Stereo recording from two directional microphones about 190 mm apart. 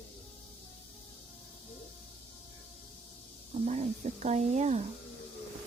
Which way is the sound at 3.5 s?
35° right (ahead or behind).